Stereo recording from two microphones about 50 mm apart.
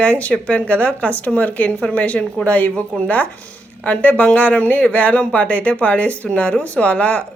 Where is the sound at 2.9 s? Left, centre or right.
Centre.